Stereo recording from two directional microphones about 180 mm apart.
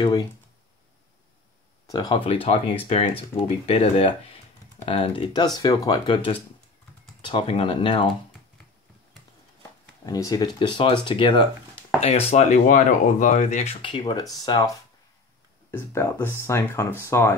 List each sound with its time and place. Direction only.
1.9 s speech: 20° left (ahead or behind)
9.6 s speech: 20° left (ahead or behind); by 13.7 s 40° left (ahead or behind)
13.8 s speech: 25° left (ahead or behind)
15.7 s speech: 15° left (ahead or behind)